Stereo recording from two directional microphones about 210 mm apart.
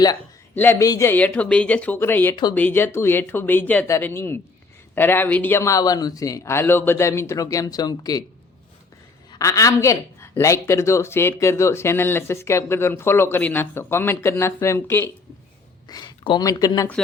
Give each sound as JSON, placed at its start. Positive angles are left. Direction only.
{"t": 0.5, "sound": "speech", "side_deg": 10}
{"t": 9.3, "sound": "speech", "side_deg": 15}